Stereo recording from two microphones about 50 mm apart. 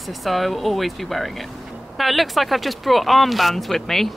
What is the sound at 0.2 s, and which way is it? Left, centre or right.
Speech, centre.